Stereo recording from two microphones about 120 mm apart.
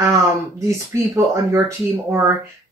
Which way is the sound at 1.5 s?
25° right (ahead or behind).